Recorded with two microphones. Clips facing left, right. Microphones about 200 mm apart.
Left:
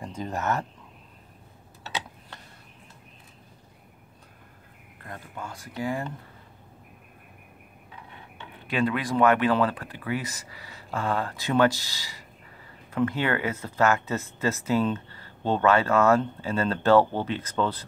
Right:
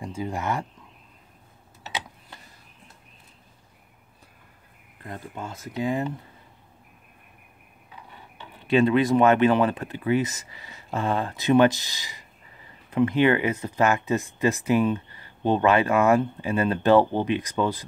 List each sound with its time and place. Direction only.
0.0 s speech: 10° right (ahead or behind)
5.0 s speech: 20° right (ahead or behind)
8.6 s speech: 25° right (ahead or behind)